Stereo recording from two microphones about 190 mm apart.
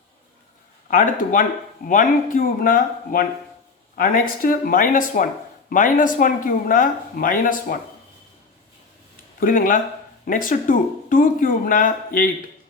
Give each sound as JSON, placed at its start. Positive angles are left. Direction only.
{"t": 0.9, "sound": "speech", "side_deg": 45}
{"t": 9.4, "sound": "speech", "side_deg": 45}